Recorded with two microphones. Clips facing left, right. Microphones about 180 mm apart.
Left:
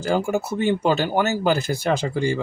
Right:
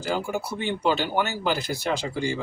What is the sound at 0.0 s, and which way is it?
Speech, 45° left (ahead or behind).